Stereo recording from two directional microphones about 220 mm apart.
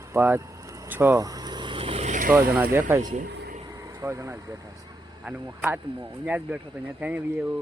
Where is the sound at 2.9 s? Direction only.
15° right (ahead or behind).